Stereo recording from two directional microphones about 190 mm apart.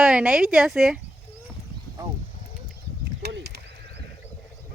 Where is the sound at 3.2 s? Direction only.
60° right (ahead or behind).